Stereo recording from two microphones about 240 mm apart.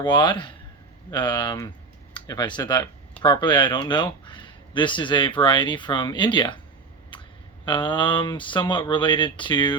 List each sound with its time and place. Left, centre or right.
0.0 s speech: centre
7.6 s speech: centre